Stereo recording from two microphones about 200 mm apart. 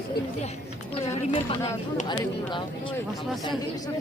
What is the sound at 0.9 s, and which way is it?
Speech, 30° left (ahead or behind).